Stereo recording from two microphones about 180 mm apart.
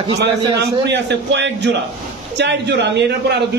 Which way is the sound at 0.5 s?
75° right (ahead or behind).